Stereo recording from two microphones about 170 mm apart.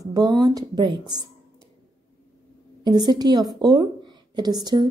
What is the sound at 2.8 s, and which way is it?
A woman's voice, 25° right (ahead or behind).